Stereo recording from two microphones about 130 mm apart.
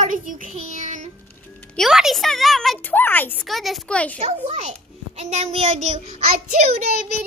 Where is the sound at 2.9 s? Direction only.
15° left (ahead or behind).